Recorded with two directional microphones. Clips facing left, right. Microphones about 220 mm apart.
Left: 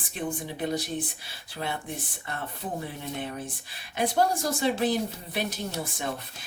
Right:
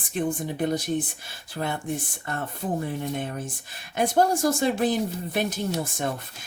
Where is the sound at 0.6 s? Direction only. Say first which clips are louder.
Right 4 dB; 45° right (ahead or behind).